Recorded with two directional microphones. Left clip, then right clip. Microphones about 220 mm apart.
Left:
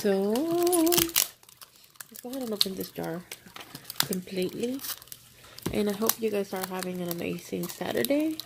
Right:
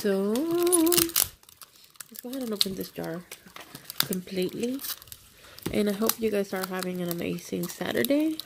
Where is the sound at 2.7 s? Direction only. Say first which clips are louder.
Right 1 dB; 15° right (ahead or behind).